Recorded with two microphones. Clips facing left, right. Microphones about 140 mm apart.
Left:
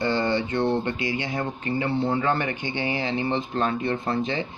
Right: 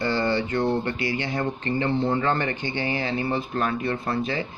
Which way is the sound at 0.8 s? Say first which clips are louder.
Even; 20° left (ahead or behind).